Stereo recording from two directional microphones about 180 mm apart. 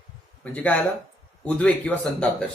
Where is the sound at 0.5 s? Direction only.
10° left (ahead or behind).